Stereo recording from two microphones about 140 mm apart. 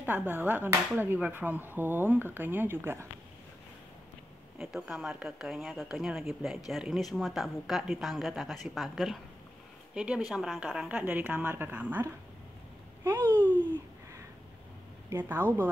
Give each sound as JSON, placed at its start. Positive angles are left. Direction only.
{"t": 0.0, "sound": "speech", "side_deg": -15}
{"t": 4.6, "sound": "speech", "side_deg": -5}
{"t": 13.2, "sound": "speech", "side_deg": 10}
{"t": 15.0, "sound": "speech", "side_deg": -15}